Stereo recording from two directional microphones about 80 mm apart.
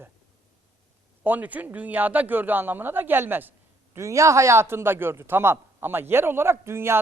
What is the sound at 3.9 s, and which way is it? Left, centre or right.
A man's voice, right.